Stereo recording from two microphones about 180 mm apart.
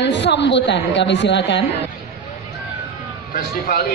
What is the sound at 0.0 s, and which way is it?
Speech, 75° left (ahead or behind).